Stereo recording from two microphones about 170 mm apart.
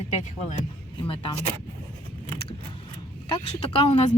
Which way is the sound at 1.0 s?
30° left (ahead or behind).